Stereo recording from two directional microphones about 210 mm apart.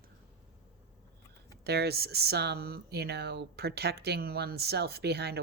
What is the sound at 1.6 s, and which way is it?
Speech, 50° right (ahead or behind).